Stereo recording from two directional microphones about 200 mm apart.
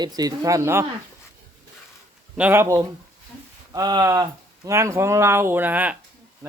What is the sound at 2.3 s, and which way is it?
Speech, 10° right (ahead or behind).